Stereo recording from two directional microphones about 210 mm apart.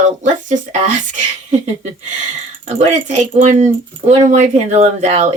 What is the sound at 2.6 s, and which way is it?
Speech, 35° right (ahead or behind).